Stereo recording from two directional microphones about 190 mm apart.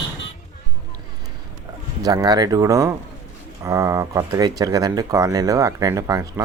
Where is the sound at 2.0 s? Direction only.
20° right (ahead or behind).